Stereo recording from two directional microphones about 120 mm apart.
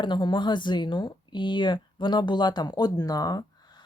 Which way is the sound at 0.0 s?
40° left (ahead or behind).